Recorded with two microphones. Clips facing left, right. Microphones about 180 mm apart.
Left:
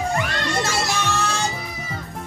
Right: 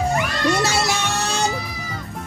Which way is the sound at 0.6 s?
75° right (ahead or behind).